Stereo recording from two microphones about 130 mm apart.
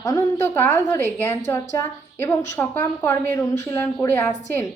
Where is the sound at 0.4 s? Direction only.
15° left (ahead or behind).